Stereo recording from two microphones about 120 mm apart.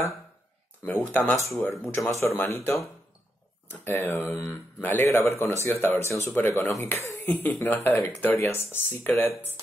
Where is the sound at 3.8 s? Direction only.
20° left (ahead or behind).